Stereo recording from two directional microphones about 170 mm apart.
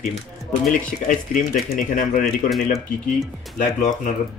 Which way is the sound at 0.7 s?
50° left (ahead or behind).